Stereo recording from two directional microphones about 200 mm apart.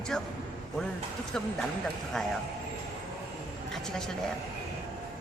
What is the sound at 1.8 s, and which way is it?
Speech, 5° left (ahead or behind).